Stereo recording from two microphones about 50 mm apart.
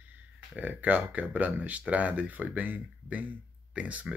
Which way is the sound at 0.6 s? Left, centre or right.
Right.